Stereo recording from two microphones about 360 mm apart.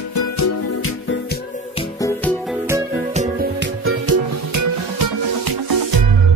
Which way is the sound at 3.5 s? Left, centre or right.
Right.